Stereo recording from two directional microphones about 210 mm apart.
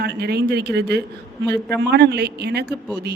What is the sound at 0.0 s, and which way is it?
A woman's voice, 50° right (ahead or behind).